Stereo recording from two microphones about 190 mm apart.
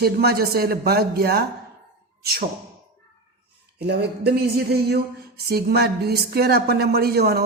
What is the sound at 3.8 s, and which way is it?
A man's voice, 60° right (ahead or behind).